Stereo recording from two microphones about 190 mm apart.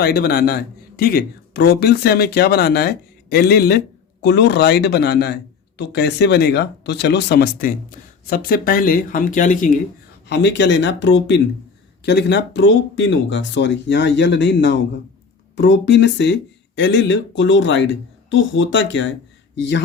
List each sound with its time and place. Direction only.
0.0 s a man's voice: 55° left (ahead or behind)
10.2 s speech: 65° left (ahead or behind)